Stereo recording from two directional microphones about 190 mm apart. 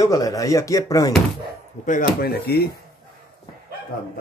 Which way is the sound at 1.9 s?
50° left (ahead or behind).